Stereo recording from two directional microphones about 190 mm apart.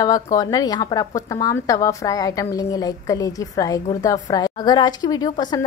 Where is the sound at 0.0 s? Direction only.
20° left (ahead or behind).